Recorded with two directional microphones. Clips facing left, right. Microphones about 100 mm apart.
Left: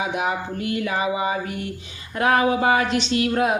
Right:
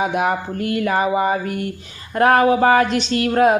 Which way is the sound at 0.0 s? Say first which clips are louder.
Right 5 dB; 50° right (ahead or behind).